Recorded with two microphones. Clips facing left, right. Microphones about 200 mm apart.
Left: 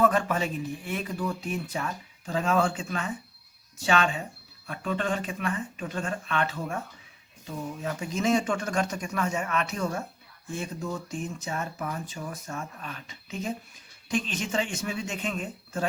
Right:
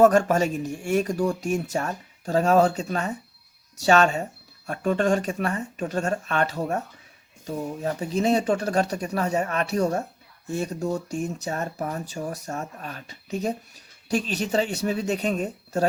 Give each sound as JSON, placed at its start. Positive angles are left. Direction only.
{"t": 0.0, "sound": "speech", "side_deg": -45}